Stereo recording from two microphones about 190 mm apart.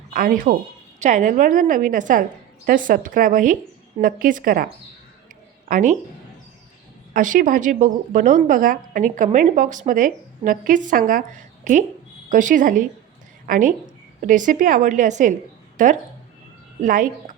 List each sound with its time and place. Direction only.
0.1 s speech: 45° right (ahead or behind)
7.1 s speech: 45° right (ahead or behind)